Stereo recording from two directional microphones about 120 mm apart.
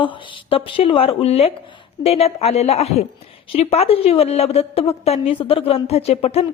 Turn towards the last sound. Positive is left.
turn(degrees=60)  # may be behind; listen again after turning